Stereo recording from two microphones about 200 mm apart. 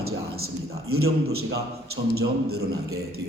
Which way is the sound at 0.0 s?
90° right.